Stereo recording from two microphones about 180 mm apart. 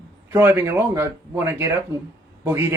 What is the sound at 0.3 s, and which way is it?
Speech, 10° right (ahead or behind).